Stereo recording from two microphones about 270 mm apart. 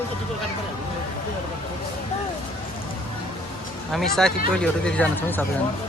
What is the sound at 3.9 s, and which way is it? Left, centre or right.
Speech, centre.